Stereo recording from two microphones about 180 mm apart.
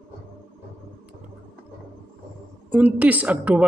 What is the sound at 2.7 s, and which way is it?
Speech, 10° right (ahead or behind).